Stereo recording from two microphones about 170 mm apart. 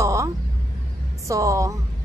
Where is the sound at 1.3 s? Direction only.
20° right (ahead or behind).